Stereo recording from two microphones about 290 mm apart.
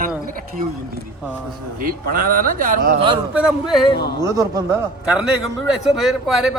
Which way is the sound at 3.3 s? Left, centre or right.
Centre.